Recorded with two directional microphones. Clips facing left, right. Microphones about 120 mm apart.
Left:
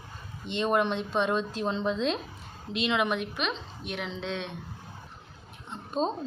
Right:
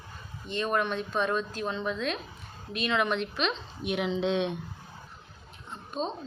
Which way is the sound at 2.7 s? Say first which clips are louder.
Even; 15° left (ahead or behind).